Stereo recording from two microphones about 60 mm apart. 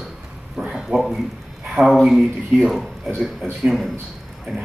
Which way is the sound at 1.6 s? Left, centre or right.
Centre.